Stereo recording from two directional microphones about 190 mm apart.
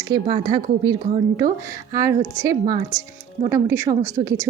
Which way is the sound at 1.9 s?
15° right (ahead or behind).